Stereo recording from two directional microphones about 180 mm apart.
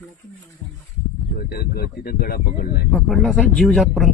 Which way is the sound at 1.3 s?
55° left (ahead or behind).